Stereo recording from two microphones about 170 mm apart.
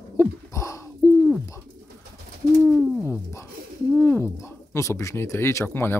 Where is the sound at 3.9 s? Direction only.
15° left (ahead or behind).